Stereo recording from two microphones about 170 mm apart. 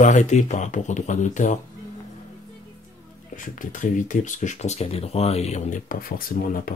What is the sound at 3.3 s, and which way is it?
Speech, 50° left (ahead or behind).